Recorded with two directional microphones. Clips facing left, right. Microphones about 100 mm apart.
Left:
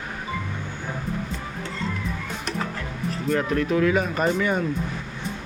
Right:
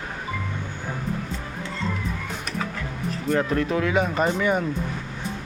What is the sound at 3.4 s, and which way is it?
Speech, 30° right (ahead or behind).